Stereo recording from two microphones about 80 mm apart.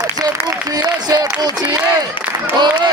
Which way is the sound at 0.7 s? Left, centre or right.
Right.